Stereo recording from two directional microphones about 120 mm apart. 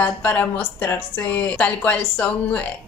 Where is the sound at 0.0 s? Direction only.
15° left (ahead or behind).